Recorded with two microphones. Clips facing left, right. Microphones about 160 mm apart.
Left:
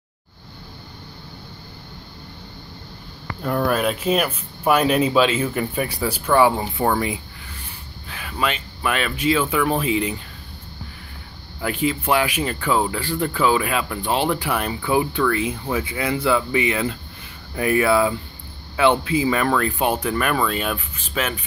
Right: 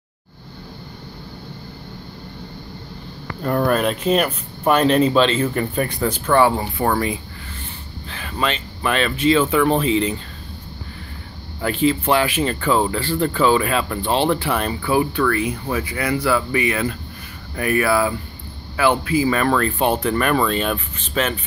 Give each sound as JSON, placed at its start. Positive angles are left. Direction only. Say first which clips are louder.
{"t": 3.4, "sound": "speech", "louder": "right 2 dB", "side_deg": 0}
{"t": 8.1, "sound": "speech", "louder": "right 1 dB", "side_deg": 10}
{"t": 11.6, "sound": "speech", "louder": "right 4 dB", "side_deg": 10}
{"t": 19.2, "sound": "speech", "louder": "right 1 dB", "side_deg": 15}